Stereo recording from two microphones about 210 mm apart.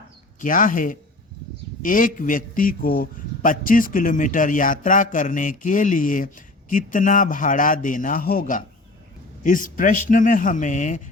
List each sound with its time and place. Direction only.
0.3 s a man's voice: 40° left (ahead or behind)